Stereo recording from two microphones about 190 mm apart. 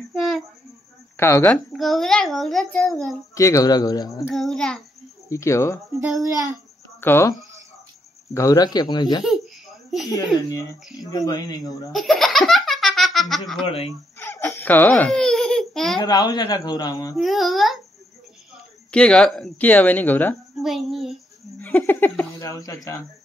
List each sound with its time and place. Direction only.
0.1 s a sound: centre (ahead or behind)
1.1 s speech: 10° left (ahead or behind)
1.7 s a child's voice: centre (ahead or behind)
3.3 s speech: 15° left (ahead or behind)
4.3 s a child's voice: centre (ahead or behind)
5.3 s speech: 15° left (ahead or behind)
8.4 s speech: 20° left (ahead or behind)
11.9 s laughter: centre (ahead or behind)
13.7 s speech: 30° left (ahead or behind)
14.1 s baby laughter: 10° left (ahead or behind)
16.0 s speech: 20° left (ahead or behind)
17.2 s a child's voice: centre (ahead or behind)
21.5 s speech: 10° left (ahead or behind)